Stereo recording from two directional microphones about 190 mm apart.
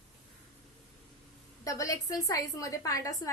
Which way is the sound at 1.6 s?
15° left (ahead or behind).